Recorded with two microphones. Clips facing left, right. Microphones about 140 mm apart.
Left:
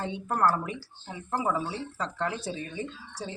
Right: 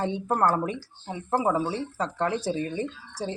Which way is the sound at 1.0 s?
30° right (ahead or behind).